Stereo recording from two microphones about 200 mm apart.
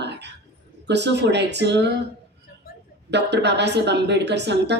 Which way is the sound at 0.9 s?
60° right (ahead or behind).